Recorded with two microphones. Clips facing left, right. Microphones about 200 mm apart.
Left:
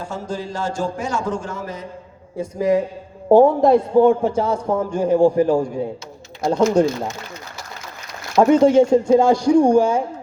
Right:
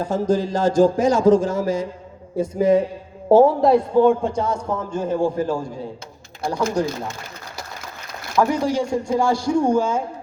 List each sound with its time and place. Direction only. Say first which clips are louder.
0.0 s a sound: right 7 dB; 40° right (ahead or behind)
1.3 s a man's voice: right 10 dB; 90° right
2.6 s a man's voice: right 1 dB; 25° right (ahead or behind)
3.2 s a woman's voice: left 1 dB; 5° right (ahead or behind)
4.2 s a man's voice: left 3 dB; 10° left (ahead or behind); by 6.8 s 25° left (ahead or behind)
8.4 s speech: left 7 dB; 25° left (ahead or behind)